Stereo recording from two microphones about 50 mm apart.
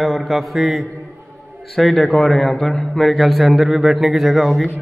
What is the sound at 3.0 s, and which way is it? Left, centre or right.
A man's voice, centre.